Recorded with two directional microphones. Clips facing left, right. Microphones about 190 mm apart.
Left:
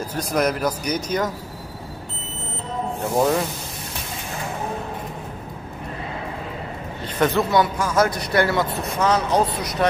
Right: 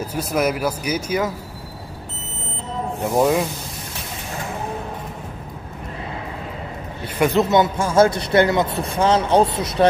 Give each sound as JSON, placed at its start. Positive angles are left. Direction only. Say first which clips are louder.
{"t": 0.0, "sound": "speech", "louder": "right 1 dB", "side_deg": -5}
{"t": 3.0, "sound": "speech", "louder": "right 2 dB", "side_deg": -10}
{"t": 7.2, "sound": "speech", "louder": "right 2 dB", "side_deg": -15}